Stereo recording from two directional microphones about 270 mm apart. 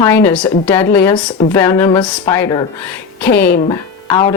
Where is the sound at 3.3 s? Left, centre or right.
Left.